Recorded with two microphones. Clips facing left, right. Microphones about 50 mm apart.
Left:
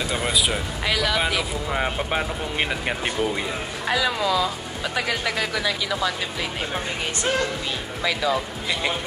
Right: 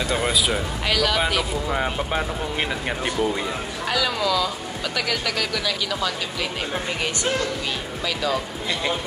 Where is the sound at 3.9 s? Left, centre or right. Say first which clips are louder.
Even; left.